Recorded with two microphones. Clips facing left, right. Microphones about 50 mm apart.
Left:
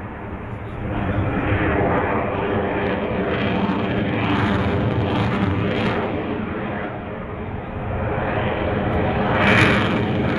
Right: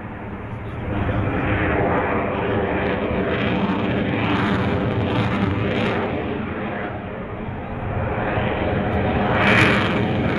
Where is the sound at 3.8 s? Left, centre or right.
Centre.